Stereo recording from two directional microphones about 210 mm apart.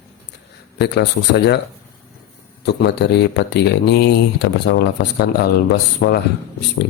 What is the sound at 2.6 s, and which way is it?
Speech, 55° left (ahead or behind).